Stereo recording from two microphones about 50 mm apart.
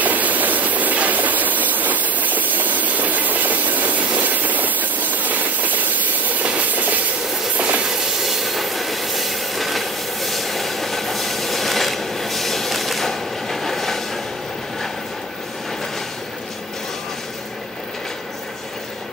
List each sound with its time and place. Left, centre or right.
0.0 s train: right
8.3 s train: centre